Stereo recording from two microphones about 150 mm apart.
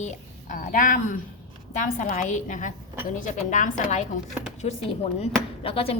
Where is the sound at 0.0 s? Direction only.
55° left (ahead or behind).